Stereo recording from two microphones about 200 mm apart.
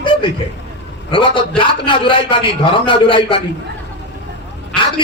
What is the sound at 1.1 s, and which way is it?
A man's voice, 25° left (ahead or behind).